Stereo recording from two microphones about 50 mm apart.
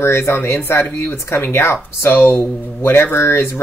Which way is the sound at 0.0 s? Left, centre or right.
Left.